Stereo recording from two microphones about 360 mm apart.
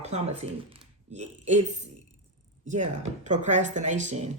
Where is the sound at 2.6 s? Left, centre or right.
Centre.